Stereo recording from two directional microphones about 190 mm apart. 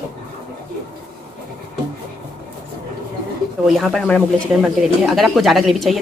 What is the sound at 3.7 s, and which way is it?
Speech, centre (ahead or behind).